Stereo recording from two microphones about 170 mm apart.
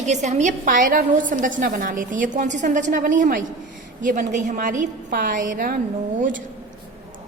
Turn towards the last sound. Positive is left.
turn(degrees=-50)  # may be behind; listen again after turning